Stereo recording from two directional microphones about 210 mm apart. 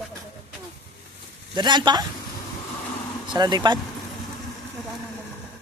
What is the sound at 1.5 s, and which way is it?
Speech, 20° right (ahead or behind).